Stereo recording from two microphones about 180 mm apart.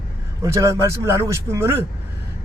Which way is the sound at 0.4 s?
15° right (ahead or behind).